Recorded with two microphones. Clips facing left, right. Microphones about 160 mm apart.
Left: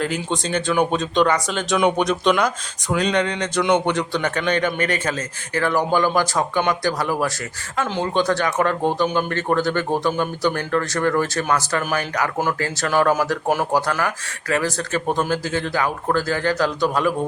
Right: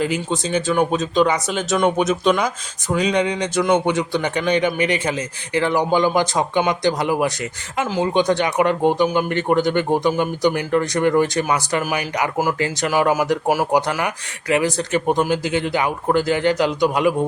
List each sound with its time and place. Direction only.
0.0 s speech: 5° right (ahead or behind)
7.9 s speech: 5° right (ahead or behind)
8.1 s speech: 15° right (ahead or behind)